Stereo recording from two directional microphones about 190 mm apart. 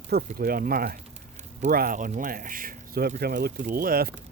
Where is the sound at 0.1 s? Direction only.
50° right (ahead or behind).